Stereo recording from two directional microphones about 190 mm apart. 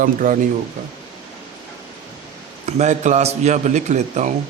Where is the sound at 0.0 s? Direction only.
45° right (ahead or behind).